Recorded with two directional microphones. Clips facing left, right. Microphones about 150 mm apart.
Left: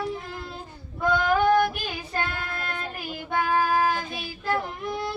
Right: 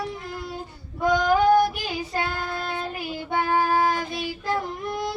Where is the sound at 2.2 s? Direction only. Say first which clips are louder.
Right 1 dB; 35° right (ahead or behind).